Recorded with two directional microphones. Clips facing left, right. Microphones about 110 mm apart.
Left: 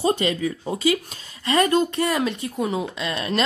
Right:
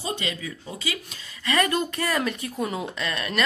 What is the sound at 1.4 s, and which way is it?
Speech, 30° left (ahead or behind).